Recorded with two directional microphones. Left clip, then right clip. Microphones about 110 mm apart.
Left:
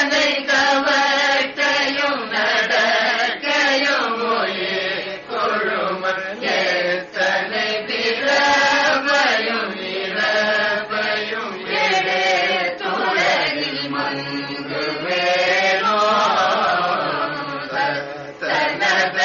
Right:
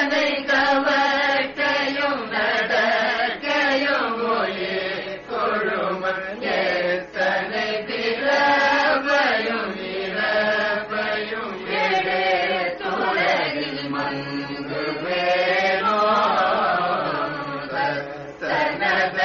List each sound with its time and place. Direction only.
0.0 s chant: 30° right (ahead or behind)
10.1 s mantra: 35° right (ahead or behind)
11.7 s chant: 30° right (ahead or behind)
15.0 s chant: 30° right (ahead or behind)
18.5 s chant: 30° right (ahead or behind)